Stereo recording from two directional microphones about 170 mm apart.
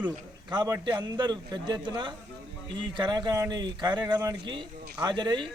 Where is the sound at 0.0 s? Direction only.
25° right (ahead or behind).